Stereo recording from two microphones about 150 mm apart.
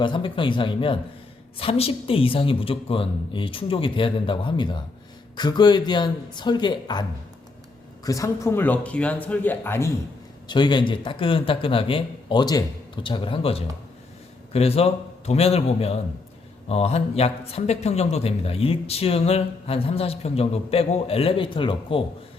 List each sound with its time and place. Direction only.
0.0 s a man's voice: 35° left (ahead or behind)
8.0 s speech: 20° left (ahead or behind)
10.5 s a man's voice: 30° left (ahead or behind)